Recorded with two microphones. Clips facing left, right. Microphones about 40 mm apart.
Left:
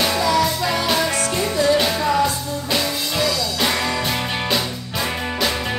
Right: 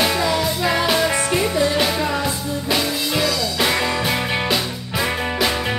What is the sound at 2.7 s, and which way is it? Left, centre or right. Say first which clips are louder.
Music: right 2 dB; centre.